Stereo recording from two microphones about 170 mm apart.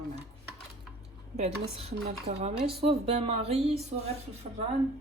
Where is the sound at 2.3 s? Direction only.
40° right (ahead or behind).